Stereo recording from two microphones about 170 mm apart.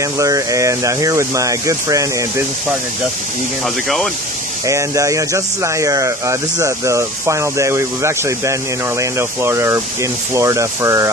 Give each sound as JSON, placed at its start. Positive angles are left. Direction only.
{"t": 0.0, "sound": "speech", "side_deg": -20}
{"t": 3.6, "sound": "speech", "side_deg": 0}
{"t": 4.6, "sound": "speech", "side_deg": -20}